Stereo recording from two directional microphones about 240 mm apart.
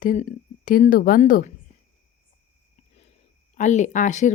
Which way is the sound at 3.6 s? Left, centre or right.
Left.